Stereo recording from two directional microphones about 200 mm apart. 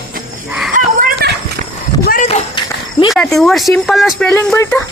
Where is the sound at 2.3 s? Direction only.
25° left (ahead or behind).